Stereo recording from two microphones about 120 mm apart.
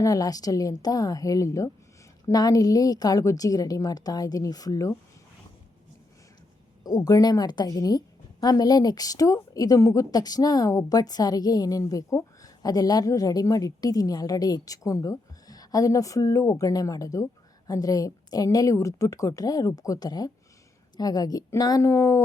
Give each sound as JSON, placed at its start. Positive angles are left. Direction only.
{"t": 0.0, "sound": "a woman's voice", "side_deg": 30}
{"t": 6.8, "sound": "a woman's voice", "side_deg": 30}